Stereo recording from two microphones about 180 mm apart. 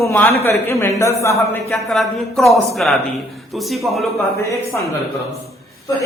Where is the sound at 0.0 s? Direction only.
10° left (ahead or behind).